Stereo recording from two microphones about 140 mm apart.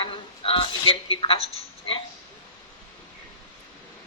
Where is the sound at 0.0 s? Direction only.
40° left (ahead or behind).